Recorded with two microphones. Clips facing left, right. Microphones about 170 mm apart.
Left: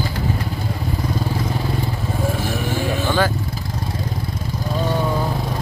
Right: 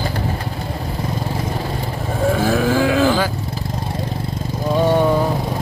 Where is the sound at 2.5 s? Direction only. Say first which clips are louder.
Right 7 dB; 90° right.